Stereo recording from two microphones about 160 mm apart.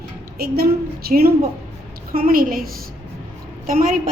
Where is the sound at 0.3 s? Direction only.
75° right (ahead or behind).